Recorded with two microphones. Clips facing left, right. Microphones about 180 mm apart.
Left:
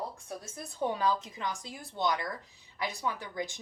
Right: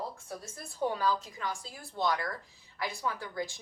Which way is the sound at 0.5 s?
20° left (ahead or behind).